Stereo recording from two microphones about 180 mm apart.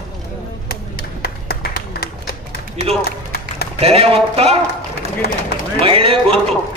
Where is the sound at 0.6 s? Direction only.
60° left (ahead or behind).